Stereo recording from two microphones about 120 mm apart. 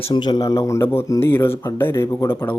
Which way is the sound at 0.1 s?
35° left (ahead or behind).